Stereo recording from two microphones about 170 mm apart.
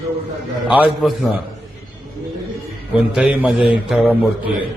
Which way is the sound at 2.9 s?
5° right (ahead or behind).